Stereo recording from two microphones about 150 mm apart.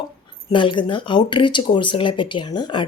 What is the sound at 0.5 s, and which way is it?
Speech, 30° left (ahead or behind).